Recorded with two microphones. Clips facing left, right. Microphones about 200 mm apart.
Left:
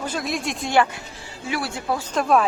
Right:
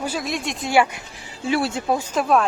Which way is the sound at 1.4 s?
25° right (ahead or behind).